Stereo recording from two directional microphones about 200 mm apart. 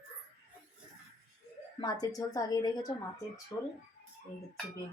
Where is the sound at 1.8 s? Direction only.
15° left (ahead or behind).